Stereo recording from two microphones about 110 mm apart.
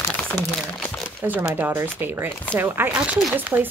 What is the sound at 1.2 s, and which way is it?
Speech, 15° right (ahead or behind).